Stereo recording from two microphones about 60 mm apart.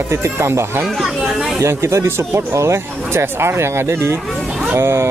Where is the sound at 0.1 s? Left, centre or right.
Right.